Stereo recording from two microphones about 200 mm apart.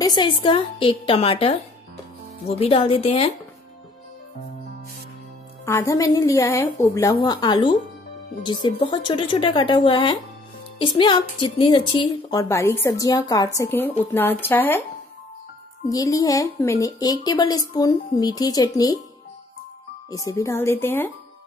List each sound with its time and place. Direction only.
0.0 s a woman's voice: 20° left (ahead or behind)
5.7 s a woman's voice: 15° left (ahead or behind)
15.9 s a woman's voice: 20° left (ahead or behind)
20.1 s a woman's voice: 15° left (ahead or behind)